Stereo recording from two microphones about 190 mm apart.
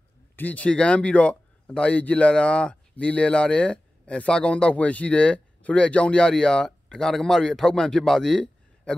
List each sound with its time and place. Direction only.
0.4 s speech: 10° left (ahead or behind)